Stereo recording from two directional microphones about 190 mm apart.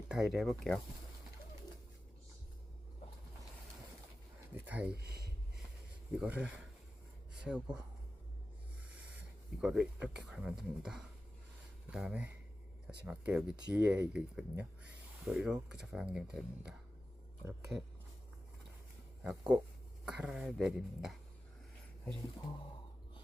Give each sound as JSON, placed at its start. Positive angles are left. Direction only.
{"t": 0.1, "sound": "speech", "side_deg": 0}
{"t": 4.6, "sound": "speech", "side_deg": -10}
{"t": 4.9, "sound": "speech", "side_deg": -55}
{"t": 6.1, "sound": "speech", "side_deg": -5}
{"t": 9.0, "sound": "speech", "side_deg": -5}
{"t": 19.2, "sound": "speech", "side_deg": -5}